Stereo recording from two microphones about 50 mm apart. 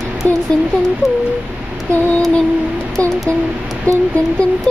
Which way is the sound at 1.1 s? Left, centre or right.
Right.